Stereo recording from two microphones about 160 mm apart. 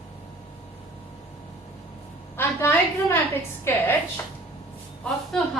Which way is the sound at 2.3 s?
15° left (ahead or behind).